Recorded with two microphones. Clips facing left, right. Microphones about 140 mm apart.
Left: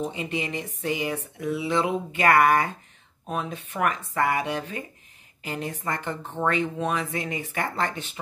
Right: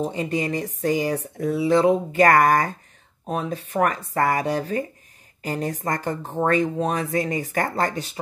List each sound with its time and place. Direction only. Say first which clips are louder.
0.0 s speech: right 5 dB; 40° right (ahead or behind)